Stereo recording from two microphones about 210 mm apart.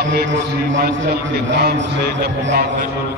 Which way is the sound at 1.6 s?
50° right (ahead or behind).